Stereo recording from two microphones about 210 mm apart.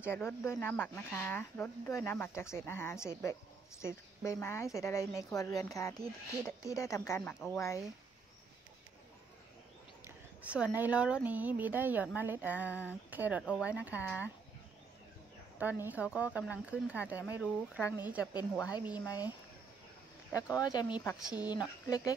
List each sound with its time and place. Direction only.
0.0 s a woman's voice: 10° left (ahead or behind)
10.0 s speech: 5° right (ahead or behind)
15.6 s speech: 10° right (ahead or behind)
18.9 s speech: 20° left (ahead or behind)
20.3 s a woman's voice: 15° left (ahead or behind)